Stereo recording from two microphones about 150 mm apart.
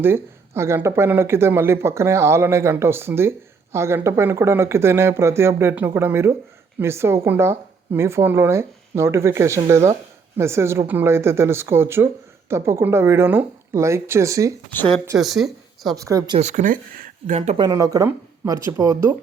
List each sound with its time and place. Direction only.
0.0 s speech: 15° right (ahead or behind)
14.7 s speech: 10° left (ahead or behind)
15.2 s speech: centre (ahead or behind)
16.0 s speech: 25° right (ahead or behind)
16.4 s speech: 55° right (ahead or behind)
17.3 s speech: 50° right (ahead or behind)
17.6 s speech: 25° right (ahead or behind)